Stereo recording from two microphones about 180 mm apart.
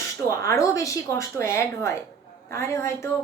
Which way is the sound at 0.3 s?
15° left (ahead or behind).